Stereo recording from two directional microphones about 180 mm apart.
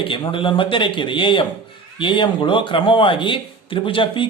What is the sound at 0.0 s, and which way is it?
Speech, 30° left (ahead or behind).